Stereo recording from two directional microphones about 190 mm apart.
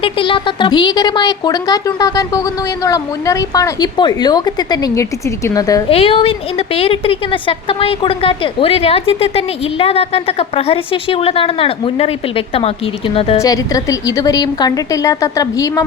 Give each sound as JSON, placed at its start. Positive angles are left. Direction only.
{"t": 0.0, "sound": "a woman's voice", "side_deg": 25}
{"t": 5.9, "sound": "a woman's voice", "side_deg": 30}
{"t": 13.1, "sound": "a woman's voice", "side_deg": 30}
{"t": 13.4, "sound": "speech", "side_deg": 20}